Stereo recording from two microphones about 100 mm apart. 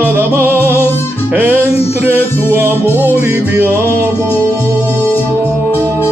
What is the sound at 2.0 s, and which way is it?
Music, 20° right (ahead or behind).